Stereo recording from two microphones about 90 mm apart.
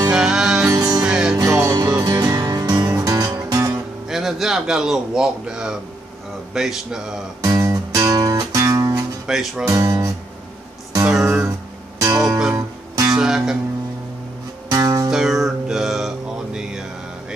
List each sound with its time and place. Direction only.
0.1 s music: 5° right (ahead or behind)
0.7 s music: 40° right (ahead or behind)
1.0 s music: 10° right (ahead or behind)
1.8 s music: 40° right (ahead or behind)
4.1 s a man's voice: centre (ahead or behind)
7.4 s music: 35° right (ahead or behind)
9.3 s speech: 5° right (ahead or behind)
9.7 s music: 35° right (ahead or behind)
11.1 s music: 5° right (ahead or behind)
12.0 s music: 40° right (ahead or behind)
13.2 s music: 5° right (ahead or behind)
14.7 s music: 40° right (ahead or behind)
15.0 s music: 5° right (ahead or behind)